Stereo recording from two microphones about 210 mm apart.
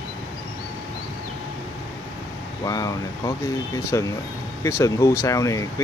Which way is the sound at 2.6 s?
15° left (ahead or behind).